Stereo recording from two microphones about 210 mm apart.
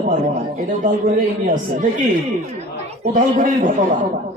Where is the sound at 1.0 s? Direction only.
35° right (ahead or behind).